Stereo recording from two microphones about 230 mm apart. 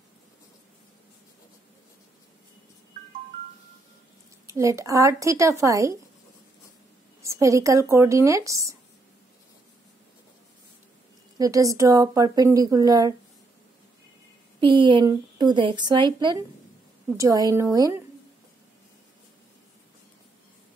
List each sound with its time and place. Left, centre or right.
4.5 s speech: centre
7.2 s speech: centre
11.3 s speech: centre
14.6 s a woman's voice: right